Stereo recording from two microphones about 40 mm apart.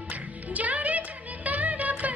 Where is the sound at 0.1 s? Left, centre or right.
Right.